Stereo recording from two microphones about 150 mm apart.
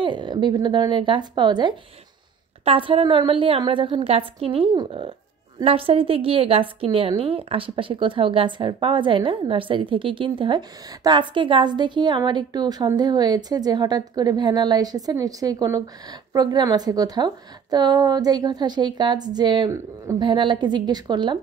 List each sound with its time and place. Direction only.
0.0 s a woman's voice: 30° right (ahead or behind)